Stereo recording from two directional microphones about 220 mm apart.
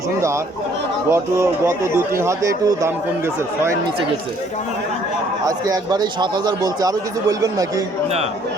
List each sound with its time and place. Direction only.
1.1 s a man's voice: 10° right (ahead or behind)
5.5 s a man's voice: 15° right (ahead or behind)